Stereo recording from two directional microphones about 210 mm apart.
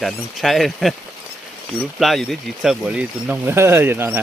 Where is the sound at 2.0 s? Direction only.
Centre (ahead or behind).